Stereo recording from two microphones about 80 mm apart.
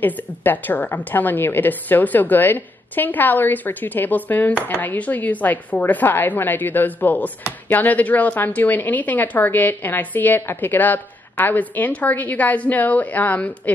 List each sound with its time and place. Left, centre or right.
0.0 s a woman's voice: left